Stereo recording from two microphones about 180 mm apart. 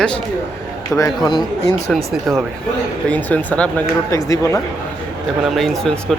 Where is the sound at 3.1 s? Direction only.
10° left (ahead or behind).